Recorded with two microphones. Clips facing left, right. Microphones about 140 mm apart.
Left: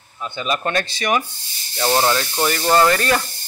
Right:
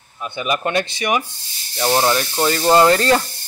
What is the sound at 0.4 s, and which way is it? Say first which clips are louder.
Speech: right 2 dB; 15° right (ahead or behind).